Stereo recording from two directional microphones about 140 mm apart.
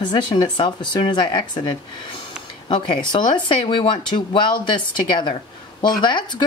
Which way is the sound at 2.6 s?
35° left (ahead or behind).